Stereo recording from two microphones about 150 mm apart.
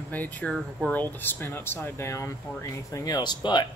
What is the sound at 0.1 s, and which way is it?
Speech, 10° left (ahead or behind).